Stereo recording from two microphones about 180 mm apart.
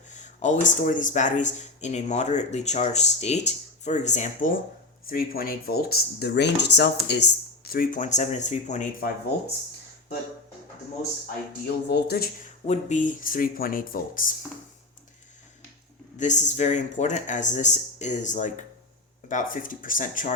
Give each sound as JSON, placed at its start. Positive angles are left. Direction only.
{"t": 0.1, "sound": "speech", "side_deg": 40}
{"t": 5.0, "sound": "speech", "side_deg": 55}
{"t": 11.9, "sound": "speech", "side_deg": 65}
{"t": 12.6, "sound": "speech", "side_deg": 40}
{"t": 16.1, "sound": "speech", "side_deg": 45}